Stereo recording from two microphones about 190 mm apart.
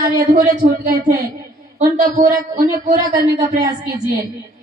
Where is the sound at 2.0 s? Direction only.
50° right (ahead or behind).